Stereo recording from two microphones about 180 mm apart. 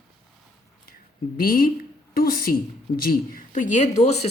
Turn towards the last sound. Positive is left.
turn(degrees=40)  # may be behind; listen again after turning